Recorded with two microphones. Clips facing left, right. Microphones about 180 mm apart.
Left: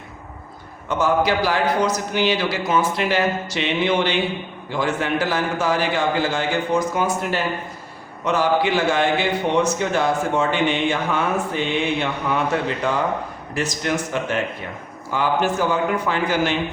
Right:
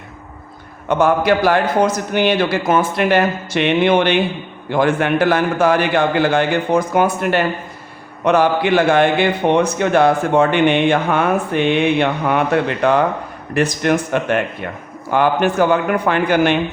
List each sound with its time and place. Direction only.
0.9 s a man's voice: 60° right (ahead or behind)